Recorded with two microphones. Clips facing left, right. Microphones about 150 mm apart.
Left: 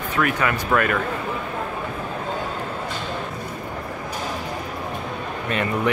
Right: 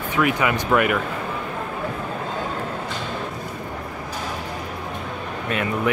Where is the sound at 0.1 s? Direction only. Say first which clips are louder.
Right 2 dB; 15° right (ahead or behind).